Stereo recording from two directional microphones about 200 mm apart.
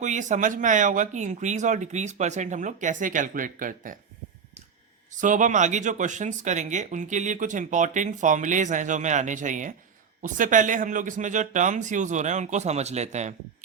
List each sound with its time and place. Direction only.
0.0 s speech: 40° right (ahead or behind)
5.1 s speech: 40° right (ahead or behind)